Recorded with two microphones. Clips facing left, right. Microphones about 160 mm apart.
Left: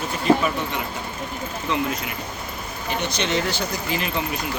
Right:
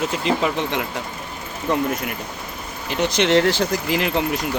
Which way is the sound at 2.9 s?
90° right.